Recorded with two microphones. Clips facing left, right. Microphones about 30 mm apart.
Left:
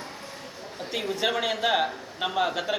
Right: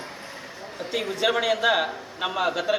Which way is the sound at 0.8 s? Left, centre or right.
Centre.